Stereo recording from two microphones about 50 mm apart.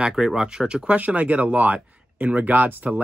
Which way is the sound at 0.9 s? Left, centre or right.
Right.